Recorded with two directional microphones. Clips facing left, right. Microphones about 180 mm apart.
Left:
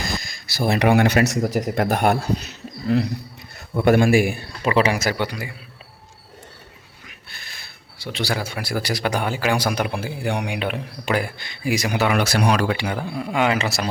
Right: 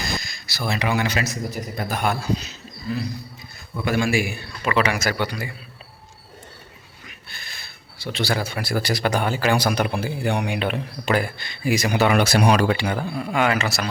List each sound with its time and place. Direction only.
0.4 s speech: 50° left (ahead or behind); by 3.1 s 65° left (ahead or behind)
3.8 s a man's voice: 55° left (ahead or behind)
4.6 s a man's voice: 30° left (ahead or behind)
7.3 s speech: 5° left (ahead or behind)
12.7 s speech: 10° left (ahead or behind); by 13.9 s 30° left (ahead or behind)